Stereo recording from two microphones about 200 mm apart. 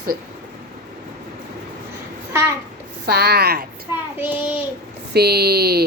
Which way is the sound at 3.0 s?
55° right (ahead or behind).